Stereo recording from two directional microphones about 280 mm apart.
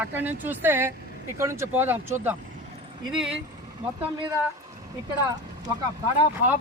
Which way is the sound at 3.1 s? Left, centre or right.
Centre.